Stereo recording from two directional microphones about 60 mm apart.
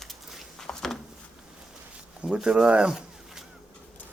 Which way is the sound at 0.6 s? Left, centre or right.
Centre.